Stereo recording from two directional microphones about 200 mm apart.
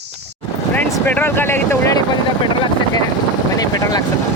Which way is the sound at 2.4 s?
25° left (ahead or behind).